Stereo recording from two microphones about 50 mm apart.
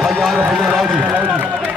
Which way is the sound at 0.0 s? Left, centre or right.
Centre.